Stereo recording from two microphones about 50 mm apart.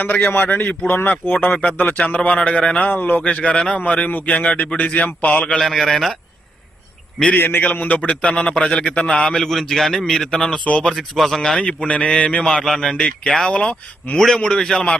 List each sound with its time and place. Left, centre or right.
0.0 s a man's voice: left
2.0 s a man's voice: left
5.5 s speech: centre
7.6 s a man's voice: left; by 11.3 s centre
11.5 s a man's voice: centre
12.5 s a man's voice: centre
14.2 s a man's voice: centre